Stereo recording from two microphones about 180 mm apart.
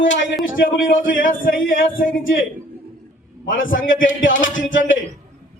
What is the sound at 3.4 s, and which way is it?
Speech, 50° left (ahead or behind).